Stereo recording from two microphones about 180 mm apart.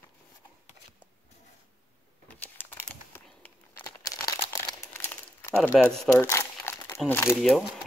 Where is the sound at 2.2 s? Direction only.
10° left (ahead or behind).